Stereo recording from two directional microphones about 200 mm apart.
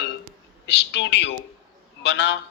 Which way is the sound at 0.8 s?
60° left (ahead or behind).